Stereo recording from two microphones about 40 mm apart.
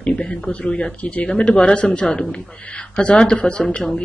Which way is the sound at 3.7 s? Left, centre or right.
Centre.